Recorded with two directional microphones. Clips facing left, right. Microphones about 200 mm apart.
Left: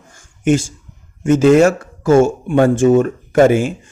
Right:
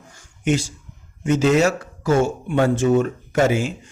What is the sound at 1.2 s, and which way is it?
Speech, 50° left (ahead or behind).